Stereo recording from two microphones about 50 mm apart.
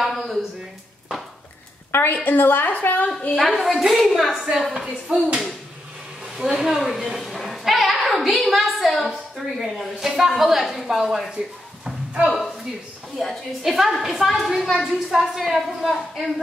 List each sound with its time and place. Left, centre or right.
0.0 s a sound: centre
1.9 s a woman's voice: left
3.3 s a woman's voice: centre
6.3 s a woman's voice: centre
11.3 s a sound: centre
12.3 s a woman's voice: centre